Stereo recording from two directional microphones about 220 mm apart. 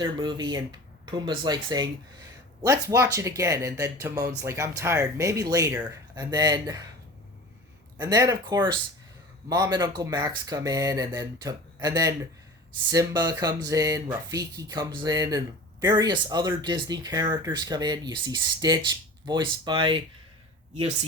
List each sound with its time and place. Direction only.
0.0 s speech: 20° right (ahead or behind)
7.9 s speech: 15° right (ahead or behind)